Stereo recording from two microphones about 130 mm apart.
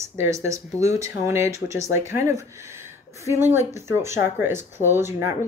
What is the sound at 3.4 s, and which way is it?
Speech, 20° right (ahead or behind).